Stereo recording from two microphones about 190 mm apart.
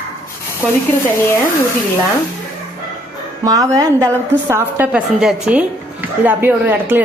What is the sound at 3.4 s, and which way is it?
A woman's voice, 15° right (ahead or behind).